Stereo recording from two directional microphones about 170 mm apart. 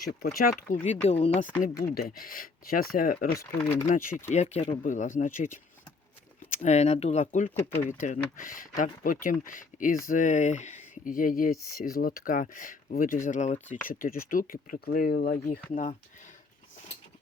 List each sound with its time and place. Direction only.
0.2 s speech: 60° left (ahead or behind)
0.7 s speech: 50° left (ahead or behind)
1.0 s speech: 40° left (ahead or behind)
1.6 s speech: 55° left (ahead or behind)
3.6 s speech: 10° left (ahead or behind)
3.8 s speech: 50° left (ahead or behind)
4.3 s speech: 40° left (ahead or behind); by 15.5 s 65° left (ahead or behind)
15.7 s speech: 50° left (ahead or behind)